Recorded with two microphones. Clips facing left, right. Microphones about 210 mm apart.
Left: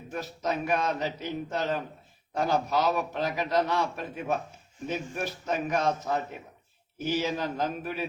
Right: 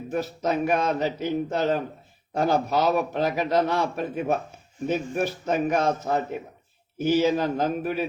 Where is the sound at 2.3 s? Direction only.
50° right (ahead or behind).